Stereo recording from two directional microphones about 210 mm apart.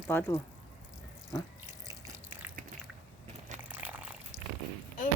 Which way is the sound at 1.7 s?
15° right (ahead or behind).